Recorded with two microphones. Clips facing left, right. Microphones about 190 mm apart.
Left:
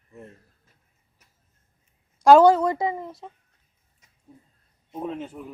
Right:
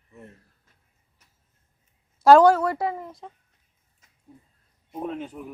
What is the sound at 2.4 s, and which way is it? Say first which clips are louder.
Speech: left 1 dB; 20° left (ahead or behind).